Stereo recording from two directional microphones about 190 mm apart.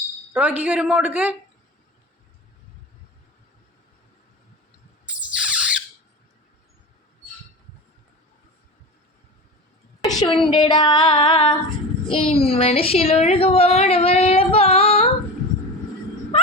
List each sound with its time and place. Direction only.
0.3 s a woman's voice: 10° right (ahead or behind)
5.4 s a sound: 5° right (ahead or behind)
10.0 s female singing: 20° left (ahead or behind)
12.1 s a woman's voice: 30° left (ahead or behind)